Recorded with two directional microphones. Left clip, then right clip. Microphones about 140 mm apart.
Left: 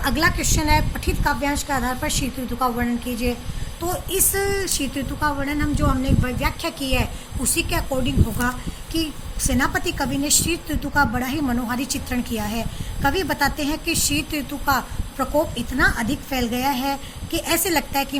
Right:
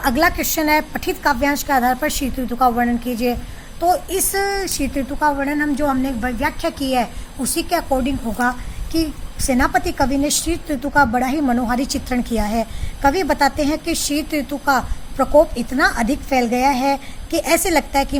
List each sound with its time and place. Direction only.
0.0 s a woman's voice: 60° right (ahead or behind)